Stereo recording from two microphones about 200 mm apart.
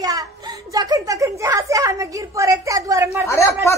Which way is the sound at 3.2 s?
15° left (ahead or behind).